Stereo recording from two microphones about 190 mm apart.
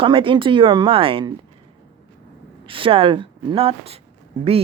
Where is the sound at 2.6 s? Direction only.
30° right (ahead or behind).